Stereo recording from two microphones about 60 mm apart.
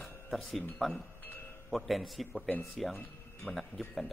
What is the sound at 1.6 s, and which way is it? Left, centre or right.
Speech, centre.